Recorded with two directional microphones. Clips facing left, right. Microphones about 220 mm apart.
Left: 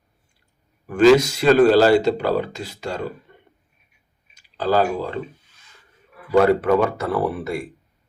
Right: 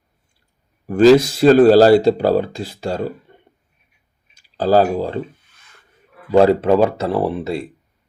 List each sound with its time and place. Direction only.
0.9 s speech: 30° right (ahead or behind)
4.5 s speech: 35° right (ahead or behind)
6.3 s speech: 25° right (ahead or behind)